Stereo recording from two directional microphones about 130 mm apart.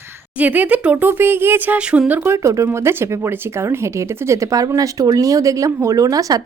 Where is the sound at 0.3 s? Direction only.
10° right (ahead or behind).